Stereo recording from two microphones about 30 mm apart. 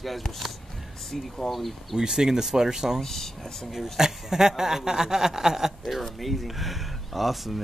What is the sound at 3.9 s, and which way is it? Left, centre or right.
Speech, centre.